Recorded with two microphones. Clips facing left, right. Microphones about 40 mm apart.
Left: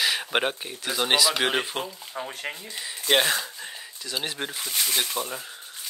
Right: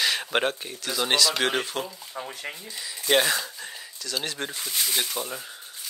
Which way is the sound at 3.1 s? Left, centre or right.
Centre.